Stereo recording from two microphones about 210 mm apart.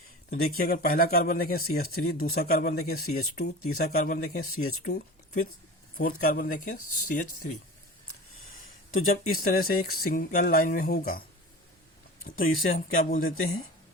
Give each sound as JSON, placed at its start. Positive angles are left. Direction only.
{"t": 0.3, "sound": "speech", "side_deg": 45}
{"t": 9.0, "sound": "speech", "side_deg": 40}
{"t": 12.2, "sound": "speech", "side_deg": 40}